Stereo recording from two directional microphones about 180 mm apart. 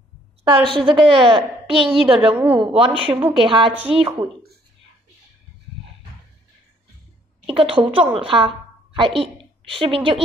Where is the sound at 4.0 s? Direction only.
30° right (ahead or behind).